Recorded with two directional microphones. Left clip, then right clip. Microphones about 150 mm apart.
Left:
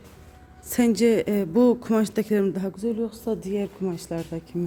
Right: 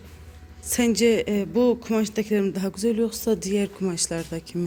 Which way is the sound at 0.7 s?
25° left (ahead or behind).